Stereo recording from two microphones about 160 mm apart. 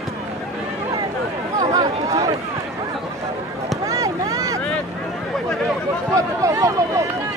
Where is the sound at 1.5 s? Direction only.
20° right (ahead or behind).